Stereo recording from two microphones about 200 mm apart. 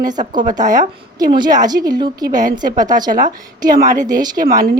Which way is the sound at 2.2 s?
40° right (ahead or behind).